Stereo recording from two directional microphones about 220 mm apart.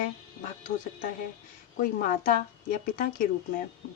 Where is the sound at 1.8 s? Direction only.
40° left (ahead or behind).